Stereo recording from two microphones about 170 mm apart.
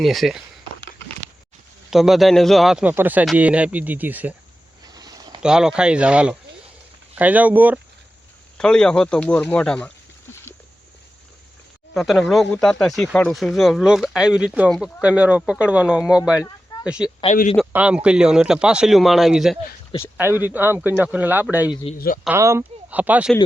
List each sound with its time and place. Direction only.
0.0 s speech: centre (ahead or behind)
1.9 s speech: centre (ahead or behind)
4.9 s a sound: 25° right (ahead or behind)
5.4 s speech: 5° right (ahead or behind)
8.5 s speech: 5° left (ahead or behind)
11.9 s speech: centre (ahead or behind)
17.3 s speech: 45° left (ahead or behind)
17.7 s speech: 10° right (ahead or behind)
19.9 s speech: 30° left (ahead or behind)
20.4 s speech: 10° right (ahead or behind)
21.9 s speech: 60° left (ahead or behind)
22.3 s speech: 15° right (ahead or behind)